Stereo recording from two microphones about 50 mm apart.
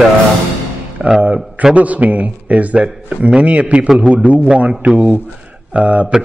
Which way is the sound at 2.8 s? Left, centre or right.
Centre.